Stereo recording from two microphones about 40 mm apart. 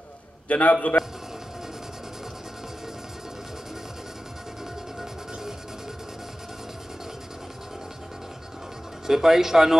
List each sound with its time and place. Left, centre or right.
0.5 s a man's voice: left
9.0 s speech: centre